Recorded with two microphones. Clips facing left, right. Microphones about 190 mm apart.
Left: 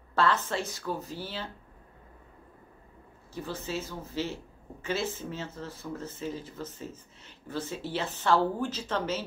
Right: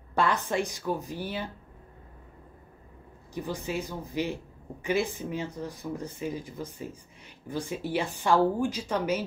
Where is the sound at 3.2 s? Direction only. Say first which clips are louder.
Right 3 dB; 15° right (ahead or behind).